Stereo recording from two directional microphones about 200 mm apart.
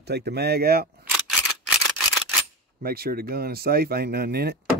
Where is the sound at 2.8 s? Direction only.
50° right (ahead or behind).